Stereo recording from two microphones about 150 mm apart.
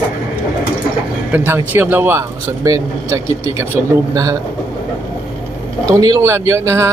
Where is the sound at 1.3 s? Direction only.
15° right (ahead or behind).